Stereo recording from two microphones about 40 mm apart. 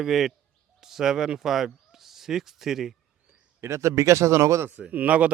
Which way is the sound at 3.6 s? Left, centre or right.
Right.